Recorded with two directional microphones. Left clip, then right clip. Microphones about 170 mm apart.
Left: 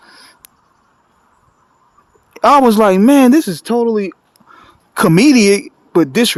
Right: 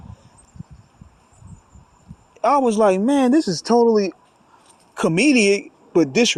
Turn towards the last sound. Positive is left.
turn(degrees=40)  # may be behind; listen again after turning